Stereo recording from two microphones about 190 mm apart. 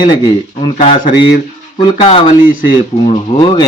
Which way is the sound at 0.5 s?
35° left (ahead or behind).